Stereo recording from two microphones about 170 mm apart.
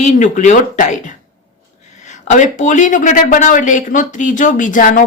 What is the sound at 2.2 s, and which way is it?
A woman's voice, 45° left (ahead or behind).